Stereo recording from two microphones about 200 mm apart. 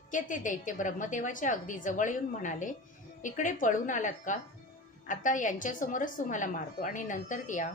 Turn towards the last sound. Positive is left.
turn(degrees=40)  # may be behind; listen again after turning